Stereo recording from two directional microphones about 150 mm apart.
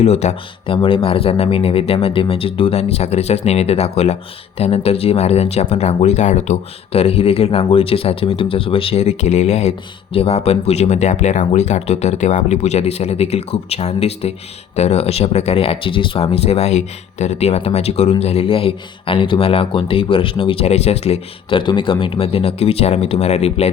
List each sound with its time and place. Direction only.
0.0 s speech: 45° left (ahead or behind)